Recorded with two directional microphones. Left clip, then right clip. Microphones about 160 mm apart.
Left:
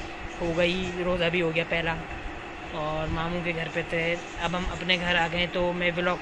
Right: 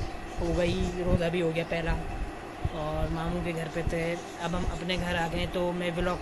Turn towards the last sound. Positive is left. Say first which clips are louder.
# left 4 dB
turn(degrees=-15)  # may be behind; listen again after turning